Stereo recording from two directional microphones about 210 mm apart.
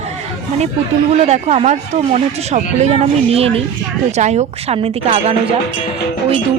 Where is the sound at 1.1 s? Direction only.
30° right (ahead or behind).